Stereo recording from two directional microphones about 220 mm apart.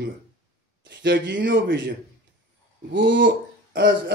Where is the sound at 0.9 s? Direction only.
50° right (ahead or behind).